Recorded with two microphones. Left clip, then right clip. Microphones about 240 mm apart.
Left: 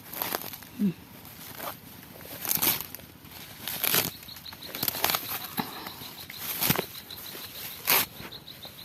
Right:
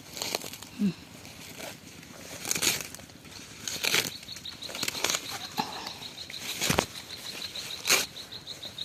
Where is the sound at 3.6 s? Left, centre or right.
Centre.